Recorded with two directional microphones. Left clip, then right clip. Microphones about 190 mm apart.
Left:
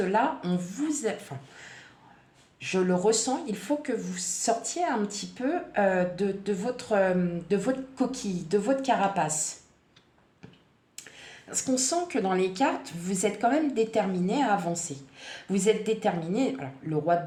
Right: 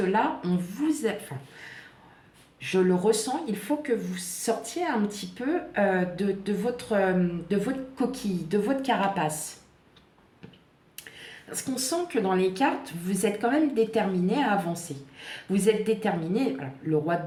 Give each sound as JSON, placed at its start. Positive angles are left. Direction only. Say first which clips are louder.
{"t": 0.1, "sound": "a woman's voice", "louder": "even", "side_deg": 30}
{"t": 2.6, "sound": "speech", "louder": "right 2 dB", "side_deg": 30}
{"t": 11.4, "sound": "a woman's voice", "louder": "left 4 dB", "side_deg": 30}